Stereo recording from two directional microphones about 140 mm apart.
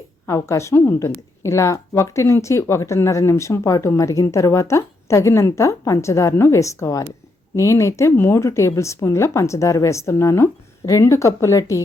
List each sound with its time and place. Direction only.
0.3 s a woman's voice: 20° left (ahead or behind)